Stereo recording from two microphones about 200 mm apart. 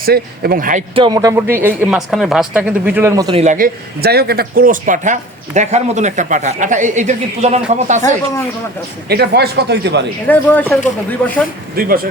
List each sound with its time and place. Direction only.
0.0 s speech: 50° right (ahead or behind)
0.9 s speech: 20° right (ahead or behind)
3.3 s speech: 35° right (ahead or behind)
9.0 s speech: 55° right (ahead or behind)
10.2 s speech: 10° left (ahead or behind)
11.8 s speech: 45° right (ahead or behind)